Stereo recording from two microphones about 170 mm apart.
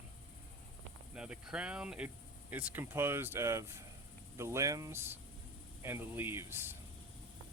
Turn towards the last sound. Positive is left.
turn(degrees=-15)  # may be behind; listen again after turning